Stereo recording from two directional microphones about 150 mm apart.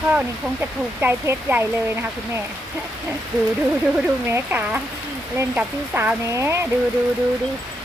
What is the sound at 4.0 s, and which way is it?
Speech, 10° right (ahead or behind).